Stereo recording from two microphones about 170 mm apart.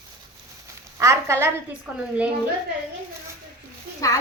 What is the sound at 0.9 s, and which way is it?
A woman's voice, 15° right (ahead or behind).